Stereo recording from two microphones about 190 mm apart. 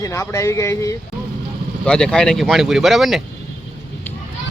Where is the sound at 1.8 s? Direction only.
5° left (ahead or behind).